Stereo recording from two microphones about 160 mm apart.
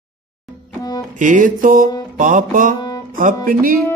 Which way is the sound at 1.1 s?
55° right (ahead or behind).